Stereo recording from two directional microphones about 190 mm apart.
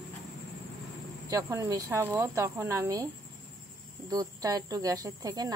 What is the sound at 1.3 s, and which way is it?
Speech, 15° right (ahead or behind).